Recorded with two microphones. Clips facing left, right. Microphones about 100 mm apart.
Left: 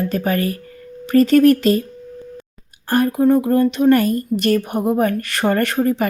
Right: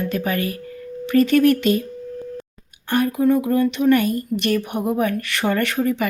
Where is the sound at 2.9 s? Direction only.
40° left (ahead or behind).